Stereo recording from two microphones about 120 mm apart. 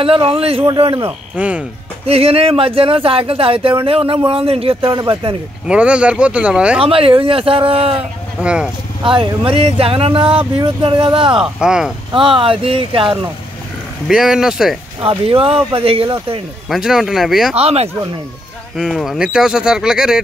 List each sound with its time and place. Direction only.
0.0 s speech: 50° right (ahead or behind)
1.3 s speech: 10° right (ahead or behind)
2.0 s speech: 55° right (ahead or behind)
5.7 s speech: 10° right (ahead or behind)
6.8 s speech: 50° right (ahead or behind)
8.4 s speech: 10° right (ahead or behind)
9.0 s speech: 45° right (ahead or behind)
11.4 s speech: 5° right (ahead or behind)
12.1 s speech: 45° right (ahead or behind)
14.0 s speech: centre (ahead or behind)
15.0 s speech: 50° right (ahead or behind)
16.6 s speech: centre (ahead or behind)
17.6 s speech: 60° right (ahead or behind)
18.8 s speech: 5° right (ahead or behind)